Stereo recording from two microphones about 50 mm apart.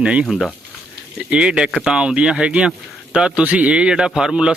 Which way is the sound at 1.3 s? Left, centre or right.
Centre.